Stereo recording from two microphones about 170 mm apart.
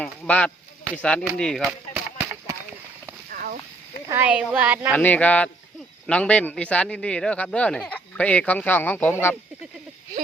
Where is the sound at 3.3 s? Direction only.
60° right (ahead or behind).